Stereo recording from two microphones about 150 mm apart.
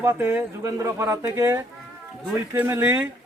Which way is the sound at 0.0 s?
15° right (ahead or behind).